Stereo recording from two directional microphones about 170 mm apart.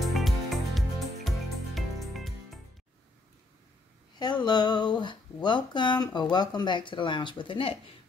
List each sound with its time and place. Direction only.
0.0 s music: centre (ahead or behind)
4.2 s speech: 25° left (ahead or behind)